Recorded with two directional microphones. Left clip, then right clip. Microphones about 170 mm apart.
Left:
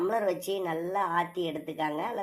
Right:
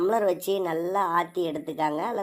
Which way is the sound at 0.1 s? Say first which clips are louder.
Right 5 dB; 30° right (ahead or behind).